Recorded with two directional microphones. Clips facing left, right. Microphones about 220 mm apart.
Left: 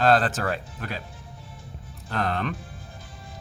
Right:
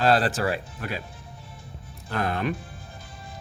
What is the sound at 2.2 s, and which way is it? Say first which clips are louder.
Speech: right 1 dB; 10° right (ahead or behind).